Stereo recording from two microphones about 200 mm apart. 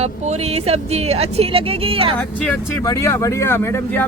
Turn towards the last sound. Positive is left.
turn(degrees=10)  # may be behind; listen again after turning